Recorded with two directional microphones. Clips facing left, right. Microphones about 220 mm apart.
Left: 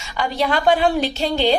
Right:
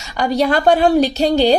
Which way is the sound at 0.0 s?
40° right (ahead or behind).